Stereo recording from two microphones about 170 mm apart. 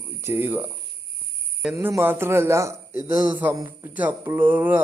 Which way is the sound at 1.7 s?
15° right (ahead or behind).